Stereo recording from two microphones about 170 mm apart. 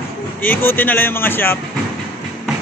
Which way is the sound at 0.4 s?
10° left (ahead or behind).